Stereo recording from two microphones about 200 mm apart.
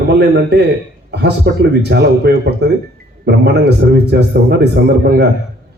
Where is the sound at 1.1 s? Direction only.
55° right (ahead or behind).